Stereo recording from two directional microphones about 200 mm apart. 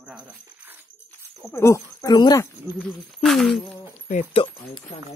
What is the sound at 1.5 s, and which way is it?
Speech, 15° left (ahead or behind).